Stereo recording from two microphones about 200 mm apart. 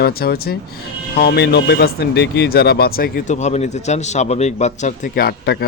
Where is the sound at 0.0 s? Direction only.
50° left (ahead or behind).